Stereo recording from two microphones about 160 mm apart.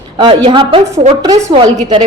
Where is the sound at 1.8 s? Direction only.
40° right (ahead or behind).